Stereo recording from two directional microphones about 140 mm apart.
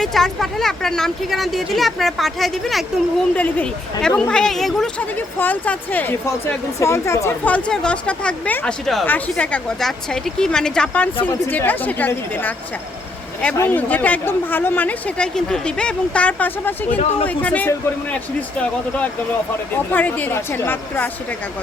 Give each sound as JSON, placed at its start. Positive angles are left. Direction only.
{"t": 0.0, "sound": "speech", "side_deg": 0}
{"t": 13.6, "sound": "speech", "side_deg": 10}
{"t": 17.0, "sound": "speech", "side_deg": 45}
{"t": 17.2, "sound": "speech", "side_deg": 10}
{"t": 19.7, "sound": "speech", "side_deg": 10}